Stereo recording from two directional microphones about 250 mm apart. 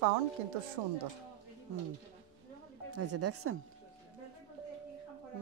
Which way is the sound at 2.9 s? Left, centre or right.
Right.